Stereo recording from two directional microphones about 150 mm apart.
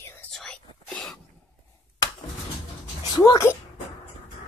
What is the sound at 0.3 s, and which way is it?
Whispering, 5° left (ahead or behind).